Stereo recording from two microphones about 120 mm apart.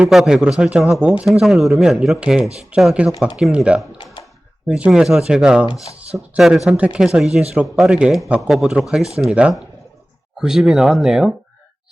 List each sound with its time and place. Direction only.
0.0 s a man's voice: 5° right (ahead or behind)
3.9 s a sound: 40° left (ahead or behind)
4.7 s a man's voice: 5° right (ahead or behind)